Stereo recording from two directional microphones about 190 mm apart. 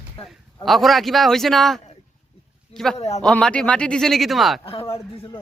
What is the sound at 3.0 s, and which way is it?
Speech, 35° left (ahead or behind).